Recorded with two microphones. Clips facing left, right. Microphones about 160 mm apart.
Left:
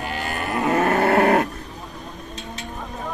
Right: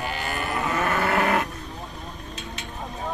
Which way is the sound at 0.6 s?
45° left (ahead or behind).